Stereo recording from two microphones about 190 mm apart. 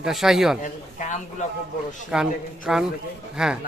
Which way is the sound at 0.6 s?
40° left (ahead or behind).